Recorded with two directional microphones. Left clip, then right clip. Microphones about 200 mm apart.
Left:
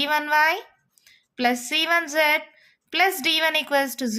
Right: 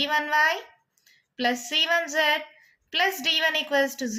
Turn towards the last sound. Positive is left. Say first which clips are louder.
# left 1 dB
turn(degrees=40)  # may be behind; listen again after turning